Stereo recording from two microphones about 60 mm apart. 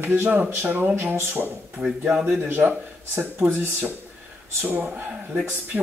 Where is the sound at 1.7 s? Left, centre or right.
Centre.